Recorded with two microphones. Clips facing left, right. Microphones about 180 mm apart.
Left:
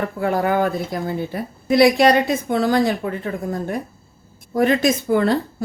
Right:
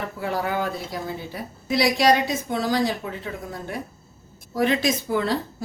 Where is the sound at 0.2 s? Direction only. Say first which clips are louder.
Left 7 dB; 55° left (ahead or behind).